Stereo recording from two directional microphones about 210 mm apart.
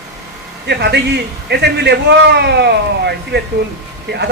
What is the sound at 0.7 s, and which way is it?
A man's voice, 55° right (ahead or behind).